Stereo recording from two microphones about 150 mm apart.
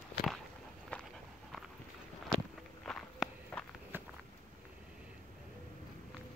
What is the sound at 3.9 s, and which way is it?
Walk, 15° right (ahead or behind).